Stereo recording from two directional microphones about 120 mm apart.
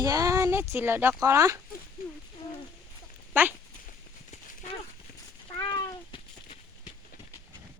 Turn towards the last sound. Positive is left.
turn(degrees=40)  # may be behind; listen again after turning